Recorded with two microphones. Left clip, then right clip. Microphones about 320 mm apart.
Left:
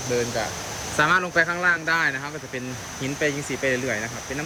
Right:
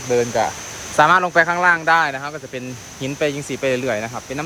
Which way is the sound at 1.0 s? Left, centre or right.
Centre.